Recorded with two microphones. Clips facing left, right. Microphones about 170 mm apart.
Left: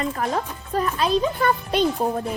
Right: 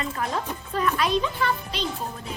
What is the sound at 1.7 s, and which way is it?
Speech, 55° left (ahead or behind).